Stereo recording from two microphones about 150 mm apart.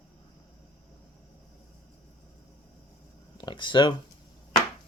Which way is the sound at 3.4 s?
30° left (ahead or behind).